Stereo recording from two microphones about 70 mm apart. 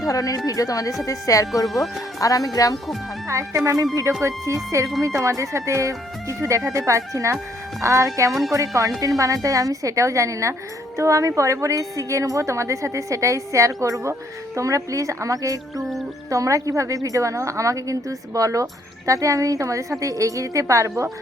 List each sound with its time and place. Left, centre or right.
0.0 s speech: left
3.2 s speech: right